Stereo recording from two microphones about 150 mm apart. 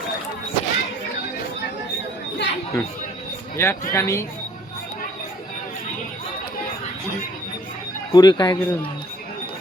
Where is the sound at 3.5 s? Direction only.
15° left (ahead or behind).